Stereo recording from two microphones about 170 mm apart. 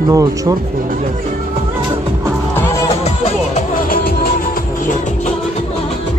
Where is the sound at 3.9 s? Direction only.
60° left (ahead or behind).